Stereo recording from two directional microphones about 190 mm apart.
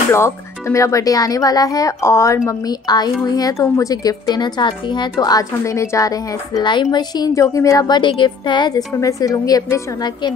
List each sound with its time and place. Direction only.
0.1 s speech: 15° left (ahead or behind)